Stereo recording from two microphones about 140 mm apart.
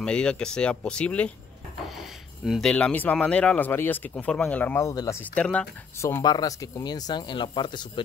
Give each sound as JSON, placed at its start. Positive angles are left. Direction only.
{"t": 0.0, "sound": "speech", "side_deg": 5}
{"t": 1.9, "sound": "a sound", "side_deg": -5}
{"t": 2.7, "sound": "speech", "side_deg": 10}
{"t": 5.2, "sound": "speech", "side_deg": 10}
{"t": 5.9, "sound": "speech", "side_deg": 20}